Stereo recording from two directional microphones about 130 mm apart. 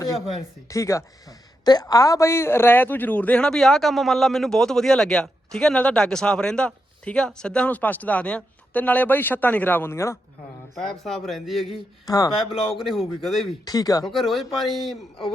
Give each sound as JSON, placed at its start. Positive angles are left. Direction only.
{"t": 0.0, "sound": "speech", "side_deg": 25}
{"t": 10.8, "sound": "speech", "side_deg": 0}
{"t": 12.0, "sound": "speech", "side_deg": 30}
{"t": 12.4, "sound": "speech", "side_deg": 0}
{"t": 13.7, "sound": "speech", "side_deg": 30}
{"t": 14.0, "sound": "speech", "side_deg": 0}